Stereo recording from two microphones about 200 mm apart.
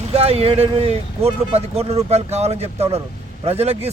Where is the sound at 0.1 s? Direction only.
30° right (ahead or behind).